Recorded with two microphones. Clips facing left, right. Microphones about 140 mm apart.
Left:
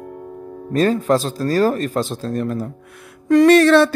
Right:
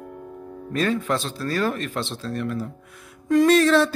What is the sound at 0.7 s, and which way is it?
Speech, 40° left (ahead or behind).